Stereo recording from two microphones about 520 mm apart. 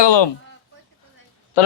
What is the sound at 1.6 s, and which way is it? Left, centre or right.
Speech, left.